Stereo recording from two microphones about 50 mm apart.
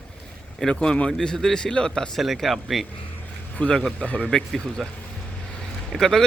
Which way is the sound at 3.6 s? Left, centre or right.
Centre.